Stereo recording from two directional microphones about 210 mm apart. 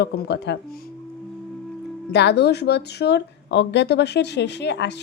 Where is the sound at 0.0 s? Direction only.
55° left (ahead or behind).